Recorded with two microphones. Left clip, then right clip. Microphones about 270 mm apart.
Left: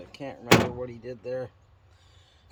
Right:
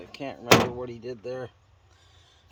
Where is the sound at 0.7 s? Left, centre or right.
Right.